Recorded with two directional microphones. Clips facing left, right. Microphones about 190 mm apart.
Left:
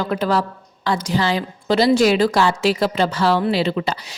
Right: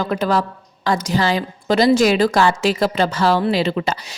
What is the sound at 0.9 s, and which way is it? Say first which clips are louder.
A woman's voice: right 1 dB; 45° right (ahead or behind).